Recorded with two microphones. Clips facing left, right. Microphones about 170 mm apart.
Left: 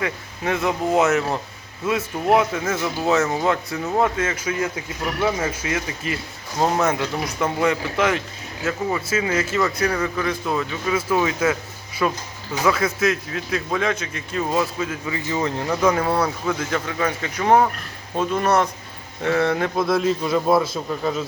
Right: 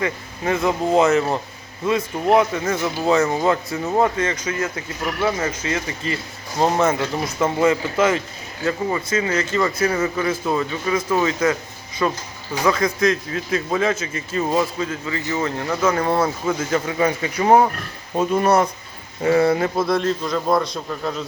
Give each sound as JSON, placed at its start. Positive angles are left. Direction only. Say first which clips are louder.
{"t": 0.0, "sound": "speech", "louder": "right 2 dB", "side_deg": 0}
{"t": 15.0, "sound": "speech", "louder": "left 1 dB", "side_deg": 15}
{"t": 16.0, "sound": "speech", "louder": "right 2 dB", "side_deg": 0}